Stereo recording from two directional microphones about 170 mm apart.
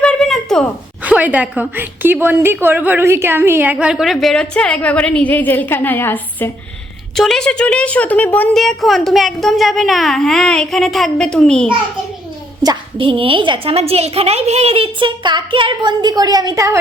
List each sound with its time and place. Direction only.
0.0 s a sound: 5° left (ahead or behind)
1.0 s a woman's voice: 10° right (ahead or behind)
12.6 s a woman's voice: 30° right (ahead or behind)